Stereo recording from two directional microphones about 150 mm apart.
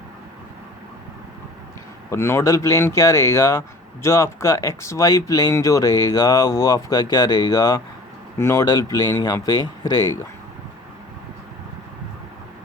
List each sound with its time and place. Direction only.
2.0 s speech: 15° left (ahead or behind)